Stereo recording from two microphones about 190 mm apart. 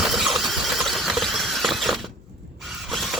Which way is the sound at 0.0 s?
Centre (ahead or behind).